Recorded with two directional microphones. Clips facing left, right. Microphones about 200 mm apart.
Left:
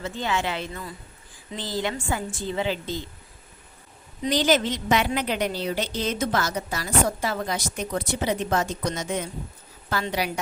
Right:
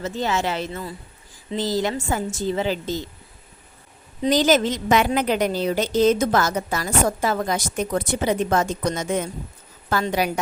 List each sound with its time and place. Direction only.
0.0 s a woman's voice: 40° right (ahead or behind)
4.2 s a woman's voice: 45° right (ahead or behind)